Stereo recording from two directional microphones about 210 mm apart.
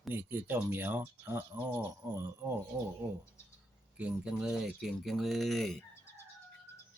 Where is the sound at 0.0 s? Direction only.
10° right (ahead or behind).